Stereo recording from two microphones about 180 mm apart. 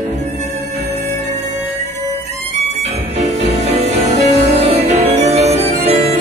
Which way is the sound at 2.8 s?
35° right (ahead or behind).